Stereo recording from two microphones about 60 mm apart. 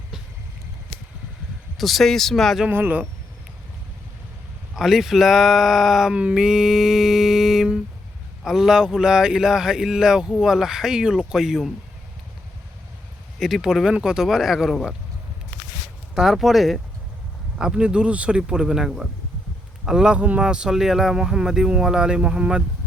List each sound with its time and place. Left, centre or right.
1.8 s speech: centre
2.6 s speech: right
4.7 s speech: centre
13.4 s speech: centre
16.1 s speech: centre
17.6 s speech: centre